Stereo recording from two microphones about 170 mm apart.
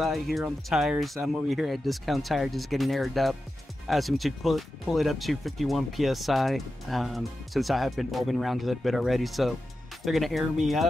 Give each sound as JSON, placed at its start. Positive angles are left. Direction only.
{"t": 0.0, "sound": "speech", "side_deg": 0}